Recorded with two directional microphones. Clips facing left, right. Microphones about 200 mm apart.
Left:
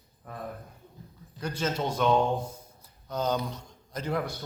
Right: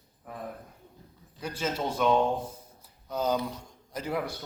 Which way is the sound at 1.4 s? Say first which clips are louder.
Left 1 dB; 5° right (ahead or behind).